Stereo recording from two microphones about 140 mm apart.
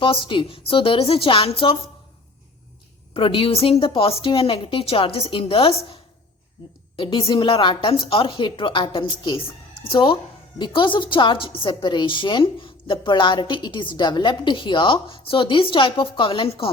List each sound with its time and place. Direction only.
0.0 s a woman's voice: 40° left (ahead or behind)
3.2 s a woman's voice: 40° left (ahead or behind)